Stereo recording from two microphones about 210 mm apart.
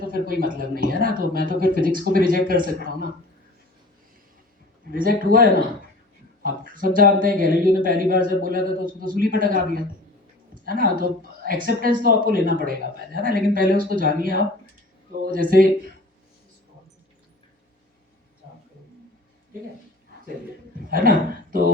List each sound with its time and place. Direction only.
0.1 s speech: 45° right (ahead or behind)
4.9 s speech: 45° right (ahead or behind)
6.9 s a man's voice: 40° right (ahead or behind)
20.9 s speech: 45° right (ahead or behind)